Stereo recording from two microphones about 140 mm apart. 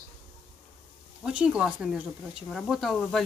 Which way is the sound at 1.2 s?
5° right (ahead or behind).